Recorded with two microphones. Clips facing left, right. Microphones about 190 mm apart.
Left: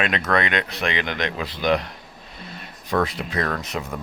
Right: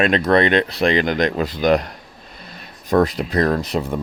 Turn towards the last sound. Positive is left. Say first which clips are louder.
# right 7 dB
turn(degrees=-35)  # may be behind; listen again after turning